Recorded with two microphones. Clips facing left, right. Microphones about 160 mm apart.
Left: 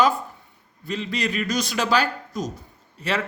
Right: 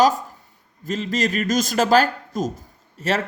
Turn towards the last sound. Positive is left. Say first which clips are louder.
# right 3 dB
turn(degrees=-45)  # may be behind; listen again after turning